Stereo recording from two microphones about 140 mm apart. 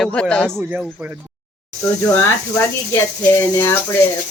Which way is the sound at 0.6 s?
10° right (ahead or behind).